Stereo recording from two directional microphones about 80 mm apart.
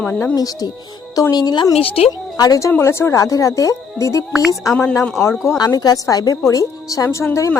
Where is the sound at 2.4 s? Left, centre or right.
Left.